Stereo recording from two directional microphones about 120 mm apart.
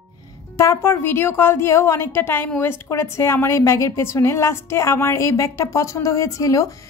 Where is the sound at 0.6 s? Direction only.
25° left (ahead or behind).